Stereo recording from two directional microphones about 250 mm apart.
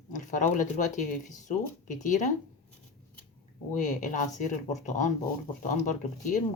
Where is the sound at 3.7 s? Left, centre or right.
Left.